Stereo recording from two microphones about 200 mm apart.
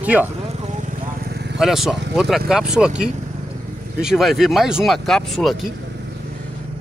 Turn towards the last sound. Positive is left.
turn(degrees=0)  # may be behind; listen again after turning